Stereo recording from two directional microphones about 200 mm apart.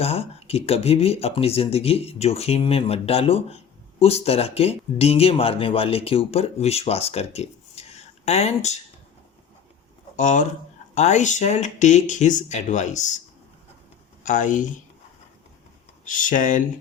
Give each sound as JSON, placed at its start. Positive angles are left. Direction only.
{"t": 0.0, "sound": "speech", "side_deg": 30}
{"t": 10.2, "sound": "speech", "side_deg": 40}
{"t": 14.3, "sound": "speech", "side_deg": 40}
{"t": 16.0, "sound": "speech", "side_deg": 40}